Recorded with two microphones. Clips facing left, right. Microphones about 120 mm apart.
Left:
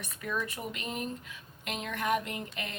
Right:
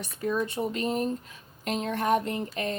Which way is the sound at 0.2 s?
30° right (ahead or behind).